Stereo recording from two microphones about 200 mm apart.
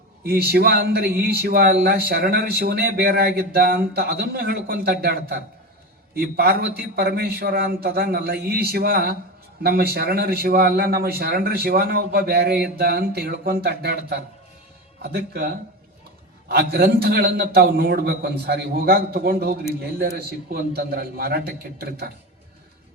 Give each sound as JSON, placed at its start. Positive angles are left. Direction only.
{"t": 0.3, "sound": "a man's voice", "side_deg": -50}